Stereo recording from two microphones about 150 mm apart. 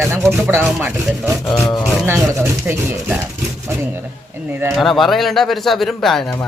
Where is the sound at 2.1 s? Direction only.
15° right (ahead or behind).